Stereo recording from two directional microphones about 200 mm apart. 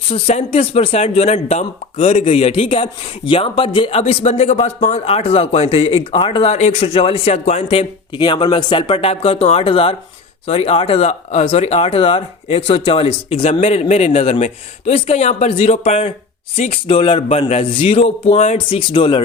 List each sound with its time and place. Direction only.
0.1 s speech: 30° left (ahead or behind)